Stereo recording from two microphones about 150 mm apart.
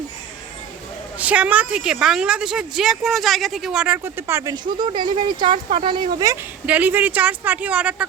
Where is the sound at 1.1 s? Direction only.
10° right (ahead or behind).